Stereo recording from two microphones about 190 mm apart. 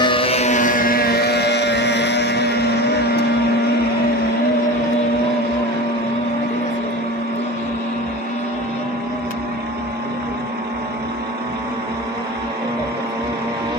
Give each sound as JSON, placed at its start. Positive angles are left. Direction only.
{"t": 0.0, "sound": "music", "side_deg": 30}